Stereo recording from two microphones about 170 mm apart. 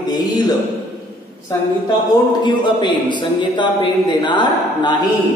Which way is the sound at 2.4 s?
25° left (ahead or behind).